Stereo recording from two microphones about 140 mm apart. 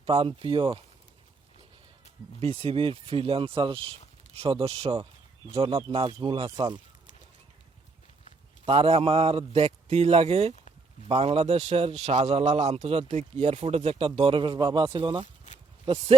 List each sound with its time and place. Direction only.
0.0 s speech: 45° right (ahead or behind)
2.4 s speech: 45° right (ahead or behind)
8.6 s speech: 45° right (ahead or behind)